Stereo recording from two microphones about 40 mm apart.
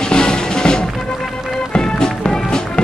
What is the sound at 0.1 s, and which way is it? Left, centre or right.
Music, centre.